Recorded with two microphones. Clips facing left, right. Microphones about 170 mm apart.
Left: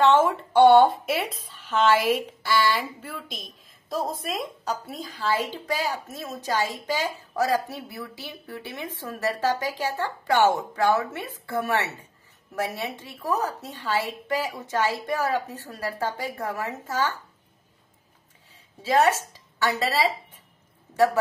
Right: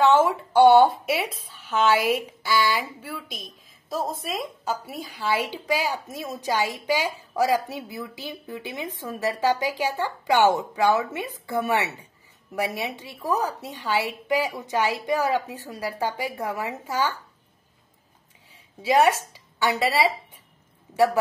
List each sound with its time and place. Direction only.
0.1 s a woman's voice: 5° right (ahead or behind)
18.8 s a woman's voice: 15° right (ahead or behind)